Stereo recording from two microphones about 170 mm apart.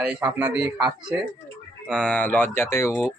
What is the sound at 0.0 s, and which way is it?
Speech, 5° right (ahead or behind).